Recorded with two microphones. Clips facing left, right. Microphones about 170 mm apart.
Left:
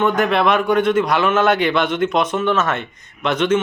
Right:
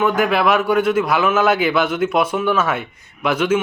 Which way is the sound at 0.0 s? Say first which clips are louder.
Even; 5° right (ahead or behind).